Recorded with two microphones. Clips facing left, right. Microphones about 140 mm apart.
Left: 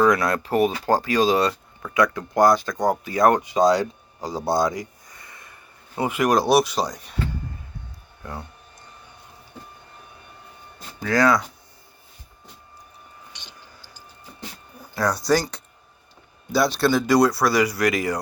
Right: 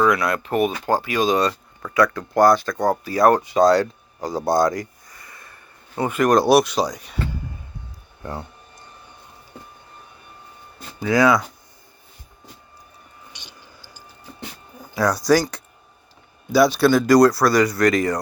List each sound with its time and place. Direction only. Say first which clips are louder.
0.0 s speech: even; 35° left (ahead or behind); by 3.8 s 15° left (ahead or behind)
4.3 s speech: right 3 dB; 10° right (ahead or behind)
4.5 s speech: right 3 dB; 10° left (ahead or behind)
5.1 s a sound: right 1 dB; 25° left (ahead or behind)
6.0 s speech: right 3 dB; 10° left (ahead or behind)
6.4 s speech: right 3 dB; centre (ahead or behind)
11.0 s speech: right 2 dB; 10° right (ahead or behind)
13.3 s vehicle: right 1 dB; 10° right (ahead or behind)
14.9 s speech: right 3 dB; centre (ahead or behind)